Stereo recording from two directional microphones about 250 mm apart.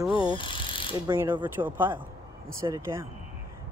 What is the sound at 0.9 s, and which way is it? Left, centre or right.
Speech, centre.